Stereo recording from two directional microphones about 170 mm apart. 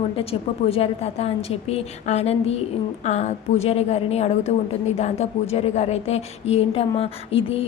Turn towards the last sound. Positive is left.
turn(degrees=35)  # may be behind; listen again after turning